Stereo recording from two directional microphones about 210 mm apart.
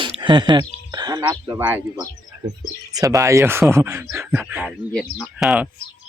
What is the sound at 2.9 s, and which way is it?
Speech, 15° right (ahead or behind).